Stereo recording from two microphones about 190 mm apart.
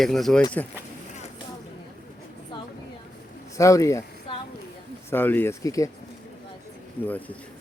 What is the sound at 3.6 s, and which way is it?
Speech, 15° left (ahead or behind).